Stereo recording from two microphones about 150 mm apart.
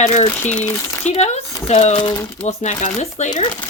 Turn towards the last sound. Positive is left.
turn(degrees=50)  # may be behind; listen again after turning